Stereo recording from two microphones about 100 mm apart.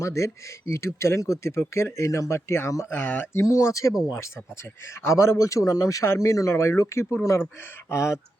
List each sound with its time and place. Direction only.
0.0 s speech: 30° left (ahead or behind)
3.4 s speech: 30° left (ahead or behind)